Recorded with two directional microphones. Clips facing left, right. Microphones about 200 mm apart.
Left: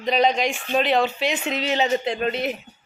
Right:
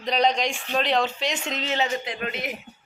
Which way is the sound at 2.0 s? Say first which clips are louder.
Left 7 dB; 30° left (ahead or behind).